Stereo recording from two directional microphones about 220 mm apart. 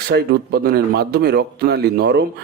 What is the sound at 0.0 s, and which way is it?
Speech, 45° right (ahead or behind).